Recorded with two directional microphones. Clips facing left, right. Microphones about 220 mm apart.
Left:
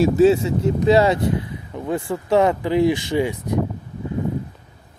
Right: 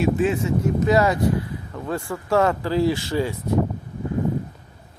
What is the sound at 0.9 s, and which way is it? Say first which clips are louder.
Speech: left 4 dB; 25° left (ahead or behind).